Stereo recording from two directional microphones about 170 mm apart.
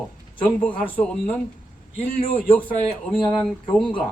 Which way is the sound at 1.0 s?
5° left (ahead or behind).